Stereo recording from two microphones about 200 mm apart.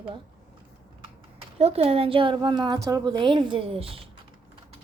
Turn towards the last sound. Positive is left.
turn(degrees=-30)  # may be behind; listen again after turning